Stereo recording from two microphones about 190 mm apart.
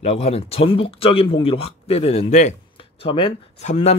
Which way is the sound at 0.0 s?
35° left (ahead or behind).